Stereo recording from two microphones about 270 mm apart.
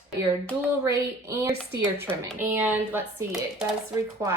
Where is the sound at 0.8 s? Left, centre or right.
Centre.